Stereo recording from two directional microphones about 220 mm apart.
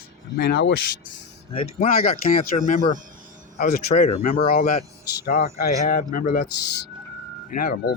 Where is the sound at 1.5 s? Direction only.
25° left (ahead or behind).